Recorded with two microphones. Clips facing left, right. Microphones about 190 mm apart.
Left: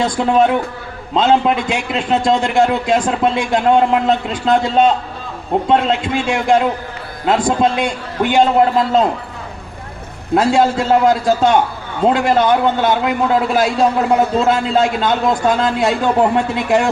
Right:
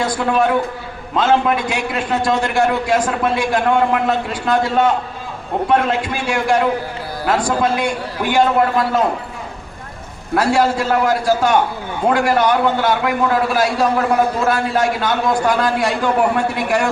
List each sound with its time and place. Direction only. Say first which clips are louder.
0.0 s a man's voice: left 3 dB; 20° left (ahead or behind)
10.3 s a man's voice: left 2 dB; 20° left (ahead or behind)